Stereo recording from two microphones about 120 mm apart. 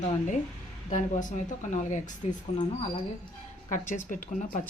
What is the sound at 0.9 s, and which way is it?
Speech, 90° left.